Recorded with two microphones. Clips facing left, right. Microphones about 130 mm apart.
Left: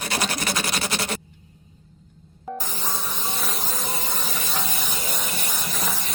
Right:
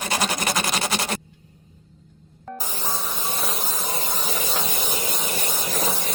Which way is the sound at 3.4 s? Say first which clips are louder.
Right 1 dB; centre (ahead or behind).